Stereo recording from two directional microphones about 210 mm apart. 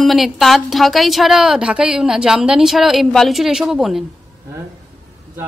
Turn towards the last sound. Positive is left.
turn(degrees=0)  # may be behind; listen again after turning